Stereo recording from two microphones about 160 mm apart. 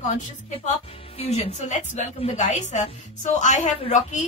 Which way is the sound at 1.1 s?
45° left (ahead or behind).